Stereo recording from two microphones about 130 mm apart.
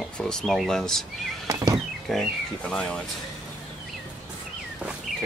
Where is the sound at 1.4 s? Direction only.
25° right (ahead or behind).